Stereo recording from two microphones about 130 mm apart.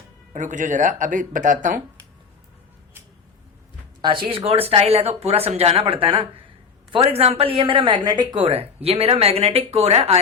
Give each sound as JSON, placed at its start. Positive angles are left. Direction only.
{"t": 0.3, "sound": "speech", "side_deg": -75}
{"t": 4.0, "sound": "speech", "side_deg": -40}
{"t": 8.4, "sound": "speech", "side_deg": -50}